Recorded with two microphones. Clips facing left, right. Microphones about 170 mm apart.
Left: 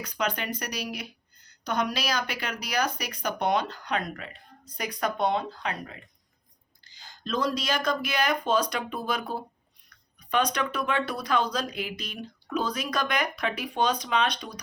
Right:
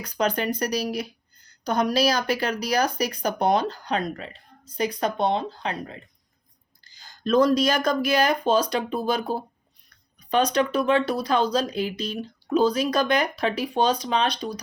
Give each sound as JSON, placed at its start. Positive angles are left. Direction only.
{"t": 0.0, "sound": "speech", "side_deg": -35}
{"t": 6.8, "sound": "speech", "side_deg": -45}